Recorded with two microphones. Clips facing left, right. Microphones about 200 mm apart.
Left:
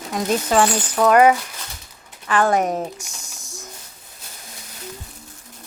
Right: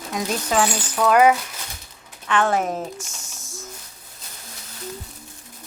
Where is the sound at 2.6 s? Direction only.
40° left (ahead or behind).